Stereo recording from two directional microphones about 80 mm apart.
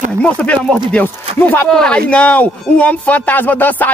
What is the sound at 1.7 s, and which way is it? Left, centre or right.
Speech, centre.